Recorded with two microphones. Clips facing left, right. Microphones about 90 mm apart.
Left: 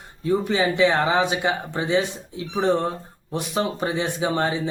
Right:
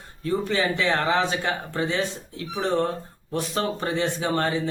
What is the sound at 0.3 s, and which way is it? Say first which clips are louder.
Speech: left 3 dB; 15° left (ahead or behind).